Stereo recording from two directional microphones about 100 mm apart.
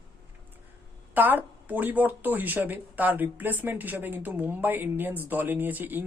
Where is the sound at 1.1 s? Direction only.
20° right (ahead or behind).